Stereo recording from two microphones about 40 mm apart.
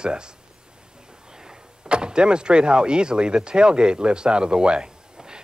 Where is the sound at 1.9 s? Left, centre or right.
Right.